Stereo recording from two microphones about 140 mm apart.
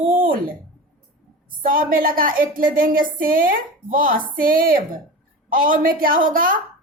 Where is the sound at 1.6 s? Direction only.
80° right.